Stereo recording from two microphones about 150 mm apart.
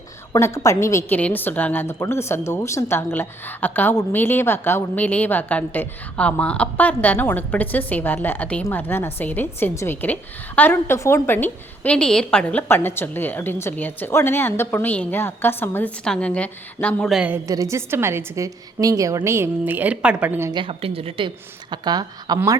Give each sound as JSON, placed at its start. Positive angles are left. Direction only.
{"t": 0.3, "sound": "a woman's voice", "side_deg": 20}
{"t": 17.2, "sound": "a woman's voice", "side_deg": -15}
{"t": 20.5, "sound": "speech", "side_deg": -35}